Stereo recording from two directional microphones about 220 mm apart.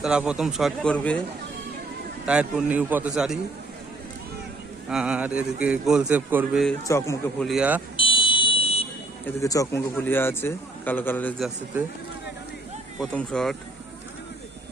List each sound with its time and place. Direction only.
0.0 s a man's voice: 5° right (ahead or behind)
2.2 s a man's voice: 5° right (ahead or behind)
4.9 s a man's voice: 5° right (ahead or behind)
6.8 s a man's voice: 15° left (ahead or behind)
7.4 s a man's voice: 5° right (ahead or behind)
7.9 s fire alarm: 25° left (ahead or behind)
9.2 s a man's voice: 15° left (ahead or behind)
13.0 s a man's voice: centre (ahead or behind)